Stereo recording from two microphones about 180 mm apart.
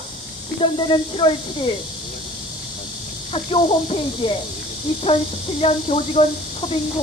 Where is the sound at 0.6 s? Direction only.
30° left (ahead or behind).